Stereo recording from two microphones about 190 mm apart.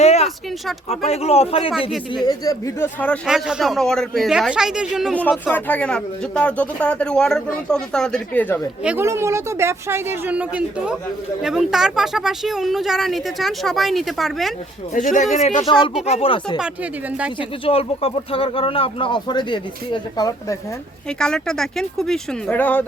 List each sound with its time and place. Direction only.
0.0 s a sound: 35° left (ahead or behind)
0.9 s speech: 35° left (ahead or behind)
2.2 s speech: 20° left (ahead or behind)
3.2 s speech: 5° right (ahead or behind)
8.8 s speech: 10° right (ahead or behind)
14.9 s speech: 40° left (ahead or behind)
17.7 s speech: 30° left (ahead or behind)
21.2 s speech: 5° left (ahead or behind)